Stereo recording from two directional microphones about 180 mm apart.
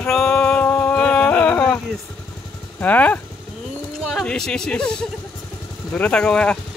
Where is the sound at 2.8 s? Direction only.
10° left (ahead or behind).